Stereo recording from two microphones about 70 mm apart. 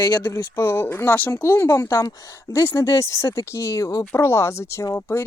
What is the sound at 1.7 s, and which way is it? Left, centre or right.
Speech, left.